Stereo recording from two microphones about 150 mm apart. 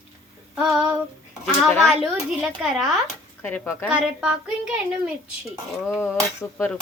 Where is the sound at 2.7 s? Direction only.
5° right (ahead or behind).